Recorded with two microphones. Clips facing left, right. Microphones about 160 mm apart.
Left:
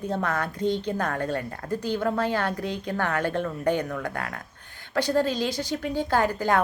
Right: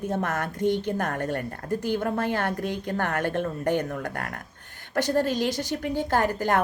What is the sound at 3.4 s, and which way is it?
Speech, 40° right (ahead or behind).